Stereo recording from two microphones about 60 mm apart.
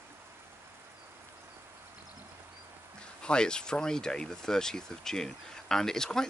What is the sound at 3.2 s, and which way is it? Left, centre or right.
Speech, centre.